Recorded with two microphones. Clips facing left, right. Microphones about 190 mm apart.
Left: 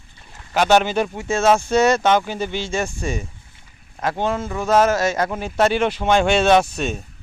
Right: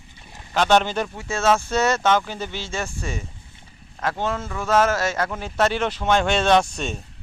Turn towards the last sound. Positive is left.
turn(degrees=5)  # may be behind; listen again after turning